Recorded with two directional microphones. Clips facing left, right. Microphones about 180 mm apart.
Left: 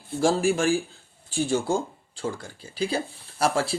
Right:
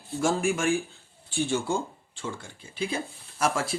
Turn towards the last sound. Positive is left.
turn(degrees=35)  # may be behind; listen again after turning